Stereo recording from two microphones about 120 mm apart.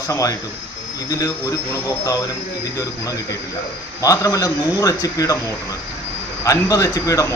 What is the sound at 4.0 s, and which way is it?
A man's voice, 30° left (ahead or behind).